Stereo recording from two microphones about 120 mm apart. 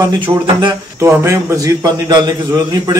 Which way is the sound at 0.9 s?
25° right (ahead or behind).